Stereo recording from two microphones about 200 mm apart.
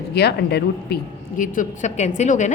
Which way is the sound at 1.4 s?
40° left (ahead or behind).